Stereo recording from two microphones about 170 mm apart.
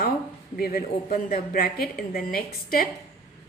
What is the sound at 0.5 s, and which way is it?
A woman's voice, 60° left (ahead or behind).